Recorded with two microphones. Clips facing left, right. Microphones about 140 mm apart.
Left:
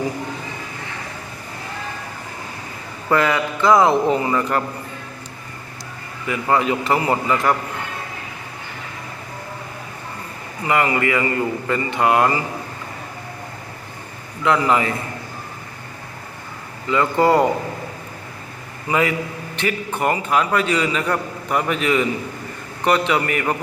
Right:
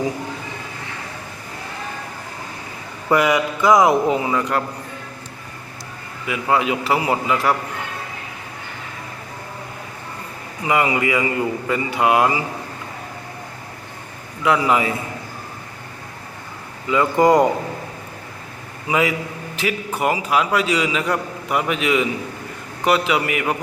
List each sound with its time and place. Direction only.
3.1 s a man's voice: 15° right (ahead or behind)
6.2 s a man's voice: 5° right (ahead or behind)
10.6 s a man's voice: 15° right (ahead or behind)
14.4 s a man's voice: 10° right (ahead or behind)
16.9 s a man's voice: 15° right (ahead or behind)
18.9 s a man's voice: 10° right (ahead or behind)